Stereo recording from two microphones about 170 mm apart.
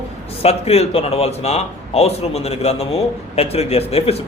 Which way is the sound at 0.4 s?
35° left (ahead or behind).